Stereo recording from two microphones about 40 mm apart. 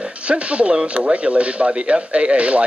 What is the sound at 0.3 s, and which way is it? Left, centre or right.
Speech, right.